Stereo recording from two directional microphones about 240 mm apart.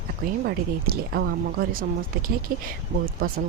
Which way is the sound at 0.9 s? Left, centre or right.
Right.